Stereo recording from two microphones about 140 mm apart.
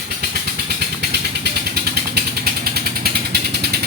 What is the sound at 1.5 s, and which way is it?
Vehicle, 90° right.